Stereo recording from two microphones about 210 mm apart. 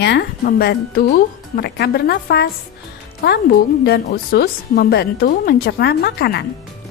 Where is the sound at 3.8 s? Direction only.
45° left (ahead or behind).